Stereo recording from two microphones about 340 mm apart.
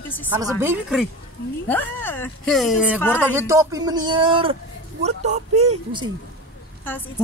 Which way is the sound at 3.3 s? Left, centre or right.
Centre.